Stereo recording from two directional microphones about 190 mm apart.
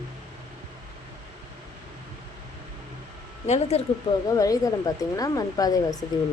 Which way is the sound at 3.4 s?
35° left (ahead or behind).